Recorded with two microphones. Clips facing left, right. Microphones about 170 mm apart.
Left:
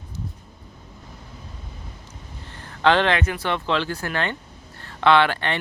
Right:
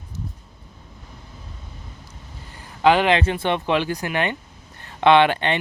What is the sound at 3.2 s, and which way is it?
Speech, 25° right (ahead or behind).